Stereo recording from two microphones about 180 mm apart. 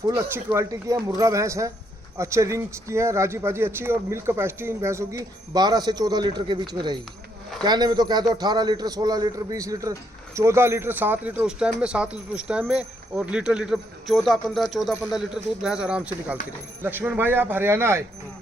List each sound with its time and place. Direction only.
0.2 s a man's voice: 15° right (ahead or behind)